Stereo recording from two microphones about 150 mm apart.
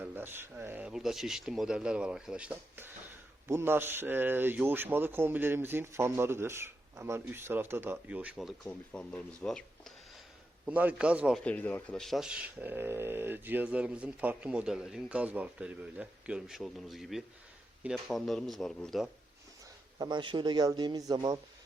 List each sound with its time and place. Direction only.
0.0 s speech: 15° right (ahead or behind); by 9.9 s 5° left (ahead or behind)
10.7 s speech: 10° right (ahead or behind)
11.4 s speech: 10° left (ahead or behind)
20.0 s a man's voice: 30° right (ahead or behind)